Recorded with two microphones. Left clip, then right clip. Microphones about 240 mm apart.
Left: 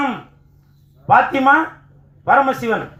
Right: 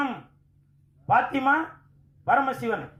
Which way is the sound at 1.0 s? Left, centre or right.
Right.